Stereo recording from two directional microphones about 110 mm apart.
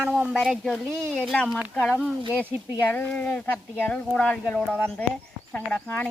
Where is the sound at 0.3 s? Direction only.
Centre (ahead or behind).